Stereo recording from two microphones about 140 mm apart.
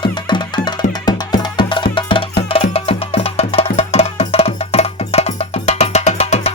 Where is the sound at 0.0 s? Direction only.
35° left (ahead or behind).